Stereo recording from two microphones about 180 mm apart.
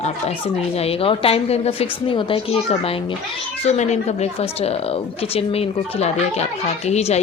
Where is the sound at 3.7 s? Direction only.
40° left (ahead or behind).